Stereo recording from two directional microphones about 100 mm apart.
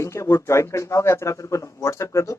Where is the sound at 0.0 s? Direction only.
30° left (ahead or behind).